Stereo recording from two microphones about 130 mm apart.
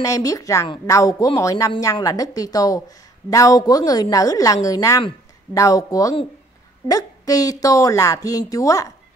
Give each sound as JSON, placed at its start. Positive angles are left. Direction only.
{"t": 0.0, "sound": "a woman's voice", "side_deg": 25}